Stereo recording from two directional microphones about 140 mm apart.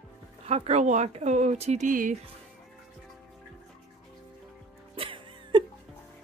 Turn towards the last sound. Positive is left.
turn(degrees=-40)  # may be behind; listen again after turning